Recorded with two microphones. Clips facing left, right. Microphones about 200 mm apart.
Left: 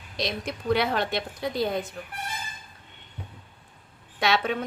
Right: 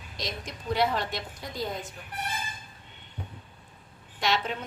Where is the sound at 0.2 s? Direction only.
70° left (ahead or behind).